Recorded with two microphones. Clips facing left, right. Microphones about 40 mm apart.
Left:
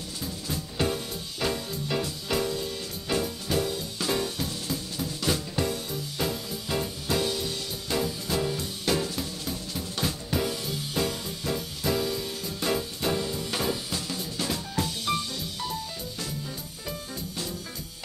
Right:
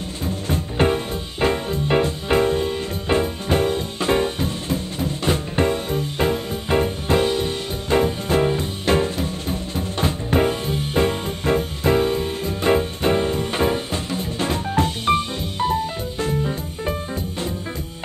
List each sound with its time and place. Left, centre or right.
0.2 s music: right